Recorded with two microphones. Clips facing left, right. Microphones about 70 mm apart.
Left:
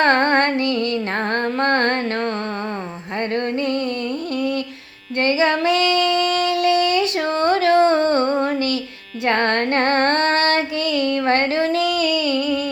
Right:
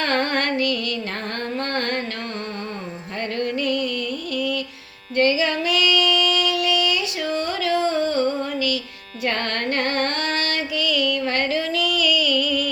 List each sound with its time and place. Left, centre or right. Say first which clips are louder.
0.0 s music: left 6 dB; left
1.3 s a sound: left 8 dB; left
3.3 s music: left 1 dB; left
5.1 s female singing: left 2 dB; left
9.2 s music: left 6 dB; left